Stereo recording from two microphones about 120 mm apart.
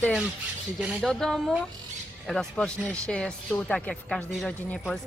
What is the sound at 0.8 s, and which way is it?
Speech, 5° right (ahead or behind).